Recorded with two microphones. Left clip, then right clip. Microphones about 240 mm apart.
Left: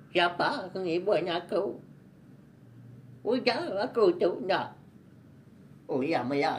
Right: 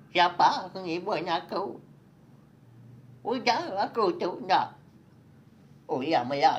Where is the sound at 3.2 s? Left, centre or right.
Right.